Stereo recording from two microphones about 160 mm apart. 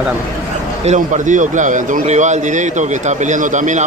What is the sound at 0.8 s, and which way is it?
A man's voice, 50° right (ahead or behind).